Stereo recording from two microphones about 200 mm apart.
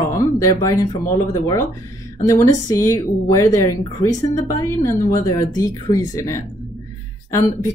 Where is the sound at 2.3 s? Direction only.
15° left (ahead or behind).